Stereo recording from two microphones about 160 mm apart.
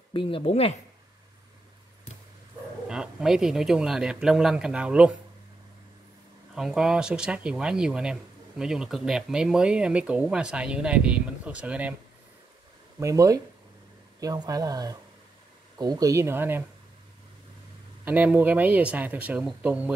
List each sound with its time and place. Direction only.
0.1 s speech: 35° left (ahead or behind)
2.9 s speech: 5° right (ahead or behind)
6.5 s speech: 5° right (ahead or behind)
13.0 s speech: 20° right (ahead or behind)
18.0 s speech: 10° right (ahead or behind)